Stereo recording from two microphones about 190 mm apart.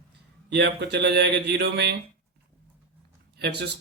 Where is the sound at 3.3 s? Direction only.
60° right (ahead or behind).